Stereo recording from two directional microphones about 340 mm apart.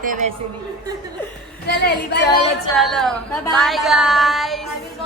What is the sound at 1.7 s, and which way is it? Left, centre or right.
Speech, left.